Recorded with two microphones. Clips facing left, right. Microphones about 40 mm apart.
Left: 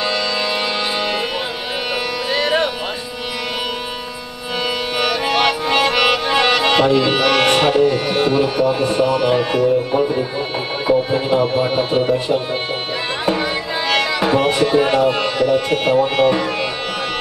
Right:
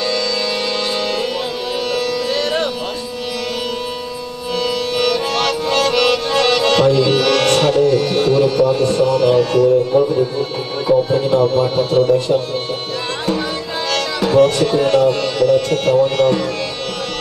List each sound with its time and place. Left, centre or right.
2.3 s music: centre
4.9 s music: centre
10.9 s speech: left
13.8 s speech: centre